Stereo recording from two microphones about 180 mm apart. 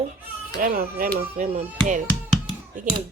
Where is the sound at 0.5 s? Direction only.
55° right (ahead or behind).